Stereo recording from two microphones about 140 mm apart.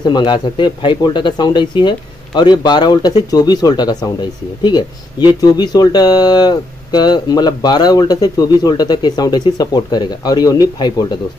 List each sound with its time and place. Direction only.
0.0 s speech: 30° left (ahead or behind)